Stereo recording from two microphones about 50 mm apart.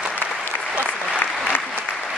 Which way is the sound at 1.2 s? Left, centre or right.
Left.